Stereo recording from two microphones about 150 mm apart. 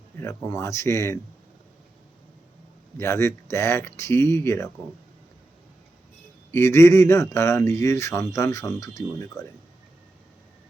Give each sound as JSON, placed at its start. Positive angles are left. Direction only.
{"t": 0.2, "sound": "speech", "side_deg": 15}
{"t": 3.0, "sound": "speech", "side_deg": 20}
{"t": 6.5, "sound": "speech", "side_deg": 20}